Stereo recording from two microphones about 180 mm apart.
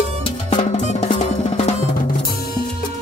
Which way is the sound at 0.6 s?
40° left (ahead or behind).